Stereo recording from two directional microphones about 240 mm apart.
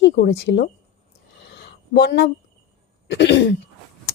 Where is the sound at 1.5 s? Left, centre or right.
Left.